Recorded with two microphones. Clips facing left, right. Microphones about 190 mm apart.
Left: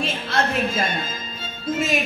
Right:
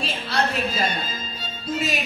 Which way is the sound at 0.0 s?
45° left (ahead or behind).